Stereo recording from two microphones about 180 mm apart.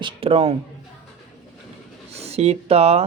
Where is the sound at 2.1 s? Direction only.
35° right (ahead or behind).